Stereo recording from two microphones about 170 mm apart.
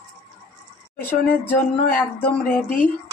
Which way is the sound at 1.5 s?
10° left (ahead or behind).